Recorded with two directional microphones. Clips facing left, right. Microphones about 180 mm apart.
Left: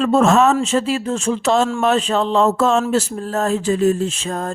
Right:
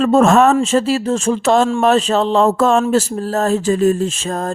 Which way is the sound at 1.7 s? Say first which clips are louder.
Right 3 dB; 35° right (ahead or behind).